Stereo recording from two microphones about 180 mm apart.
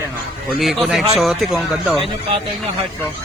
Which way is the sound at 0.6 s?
Centre (ahead or behind).